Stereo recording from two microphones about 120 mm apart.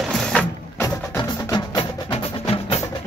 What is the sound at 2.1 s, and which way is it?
Music, 55° left (ahead or behind).